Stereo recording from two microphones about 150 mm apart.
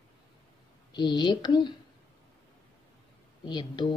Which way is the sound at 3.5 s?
30° left (ahead or behind).